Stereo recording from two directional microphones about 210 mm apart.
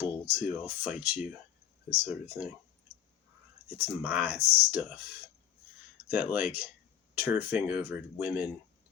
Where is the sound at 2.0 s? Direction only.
10° right (ahead or behind).